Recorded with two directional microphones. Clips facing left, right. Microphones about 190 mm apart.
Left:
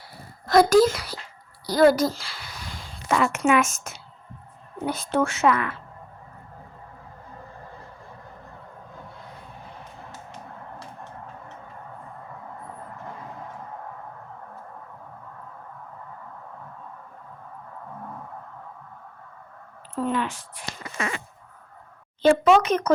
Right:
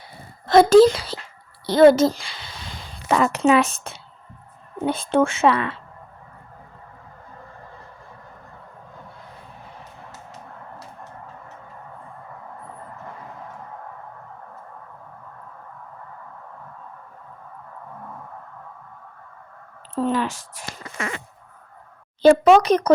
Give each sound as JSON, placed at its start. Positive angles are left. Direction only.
{"t": 0.4, "sound": "a woman's voice", "side_deg": -25}
{"t": 3.1, "sound": "a woman's voice", "side_deg": -35}
{"t": 20.0, "sound": "a sound", "side_deg": -35}
{"t": 22.2, "sound": "a woman's voice", "side_deg": -40}